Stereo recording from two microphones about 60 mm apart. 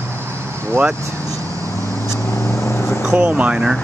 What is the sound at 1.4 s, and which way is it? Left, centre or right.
Vehicle, right.